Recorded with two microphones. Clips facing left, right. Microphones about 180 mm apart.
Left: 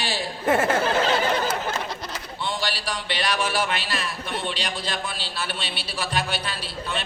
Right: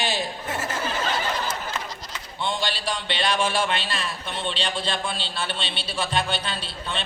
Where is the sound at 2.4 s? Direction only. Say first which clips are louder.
Right 2 dB; 20° right (ahead or behind).